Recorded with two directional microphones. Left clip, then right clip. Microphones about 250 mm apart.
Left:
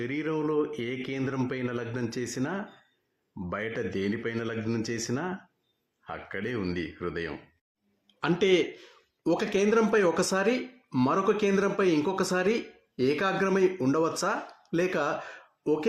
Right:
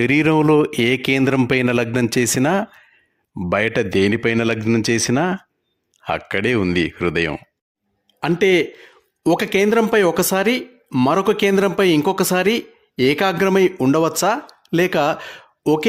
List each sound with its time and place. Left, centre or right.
0.0 s a man's voice: right